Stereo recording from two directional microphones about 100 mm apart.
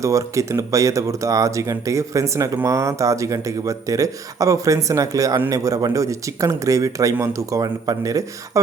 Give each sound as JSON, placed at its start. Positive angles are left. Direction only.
{"t": 0.0, "sound": "speech", "side_deg": -30}